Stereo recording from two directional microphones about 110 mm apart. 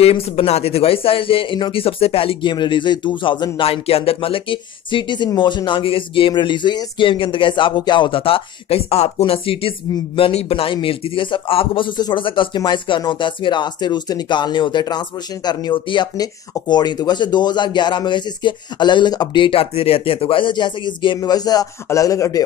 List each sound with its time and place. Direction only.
0.0 s speech: 60° left (ahead or behind)
2.5 s speech: 45° left (ahead or behind)
3.5 s a man's voice: 60° left (ahead or behind); by 22.4 s 30° left (ahead or behind)